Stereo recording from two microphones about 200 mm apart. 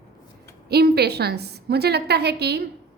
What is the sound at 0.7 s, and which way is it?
A woman's voice, 55° right (ahead or behind).